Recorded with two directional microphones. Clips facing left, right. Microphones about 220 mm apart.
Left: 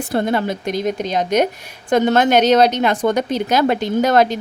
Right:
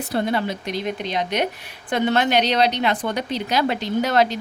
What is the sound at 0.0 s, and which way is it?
A woman's voice, 45° left (ahead or behind).